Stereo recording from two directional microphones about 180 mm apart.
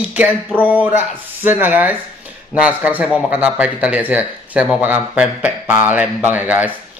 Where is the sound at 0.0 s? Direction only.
10° right (ahead or behind).